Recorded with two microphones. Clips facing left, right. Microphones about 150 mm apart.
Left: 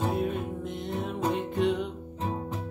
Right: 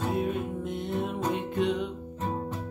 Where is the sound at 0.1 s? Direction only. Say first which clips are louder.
Right 1 dB; centre (ahead or behind).